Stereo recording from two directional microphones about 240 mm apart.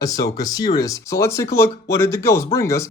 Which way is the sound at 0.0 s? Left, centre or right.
Centre.